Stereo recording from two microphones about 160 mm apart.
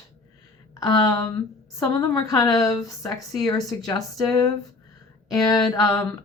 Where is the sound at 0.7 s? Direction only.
20° left (ahead or behind).